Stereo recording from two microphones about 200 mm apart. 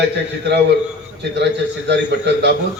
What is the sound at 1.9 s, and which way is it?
Speech, 60° right (ahead or behind).